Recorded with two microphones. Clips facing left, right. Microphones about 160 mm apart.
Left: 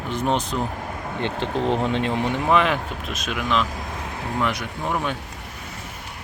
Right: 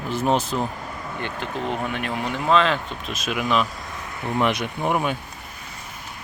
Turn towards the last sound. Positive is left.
turn(degrees=-15)  # may be behind; listen again after turning